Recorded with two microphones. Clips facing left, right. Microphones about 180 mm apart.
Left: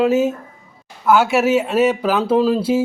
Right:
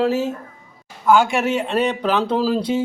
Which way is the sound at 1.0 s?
5° left (ahead or behind).